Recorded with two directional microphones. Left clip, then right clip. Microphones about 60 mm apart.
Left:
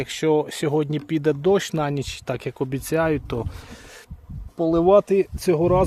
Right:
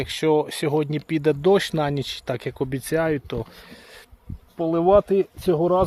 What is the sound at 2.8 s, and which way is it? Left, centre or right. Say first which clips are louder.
Speech: left 1 dB; left.